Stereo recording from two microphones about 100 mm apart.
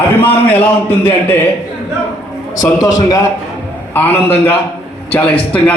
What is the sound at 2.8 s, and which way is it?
Speech, 35° left (ahead or behind).